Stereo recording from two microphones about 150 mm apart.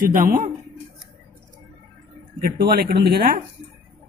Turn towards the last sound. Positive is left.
turn(degrees=-90)